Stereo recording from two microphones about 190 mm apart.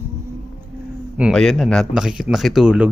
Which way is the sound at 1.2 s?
Centre (ahead or behind).